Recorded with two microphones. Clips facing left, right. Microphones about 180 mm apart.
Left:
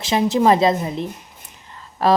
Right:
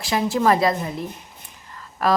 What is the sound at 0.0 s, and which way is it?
A woman's voice, 20° left (ahead or behind).